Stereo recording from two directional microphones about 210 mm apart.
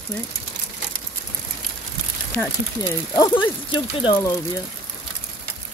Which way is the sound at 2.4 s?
15° left (ahead or behind).